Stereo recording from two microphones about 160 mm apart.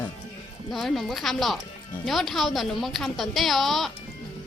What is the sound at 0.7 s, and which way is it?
A woman's voice, centre (ahead or behind).